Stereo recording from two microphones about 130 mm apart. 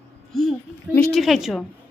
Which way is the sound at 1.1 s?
Centre (ahead or behind).